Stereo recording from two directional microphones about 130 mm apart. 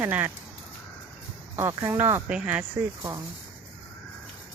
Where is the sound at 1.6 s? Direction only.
25° right (ahead or behind).